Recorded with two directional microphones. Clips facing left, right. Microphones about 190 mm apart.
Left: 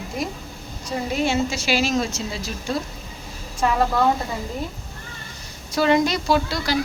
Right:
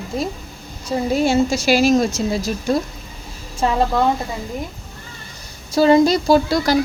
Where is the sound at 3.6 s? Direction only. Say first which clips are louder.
Right 2 dB; 30° right (ahead or behind).